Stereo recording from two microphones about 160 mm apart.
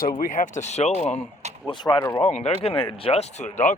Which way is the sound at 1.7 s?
30° left (ahead or behind).